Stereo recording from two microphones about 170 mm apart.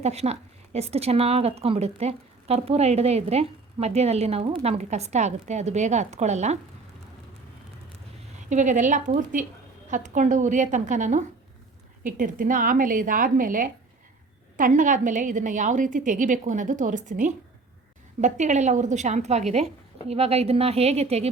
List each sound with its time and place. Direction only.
0.0 s speech: 40° right (ahead or behind)
8.4 s a woman's voice: 45° right (ahead or behind)